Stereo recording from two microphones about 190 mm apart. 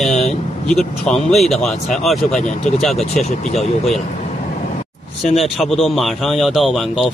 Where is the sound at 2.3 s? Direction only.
40° left (ahead or behind).